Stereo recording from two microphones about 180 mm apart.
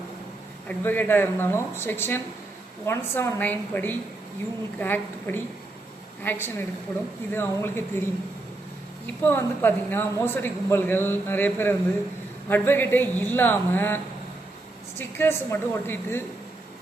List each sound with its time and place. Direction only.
0.7 s speech: 10° left (ahead or behind)
9.2 s speech: 10° left (ahead or behind)